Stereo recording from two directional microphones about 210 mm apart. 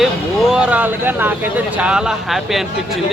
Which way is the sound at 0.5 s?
5° right (ahead or behind).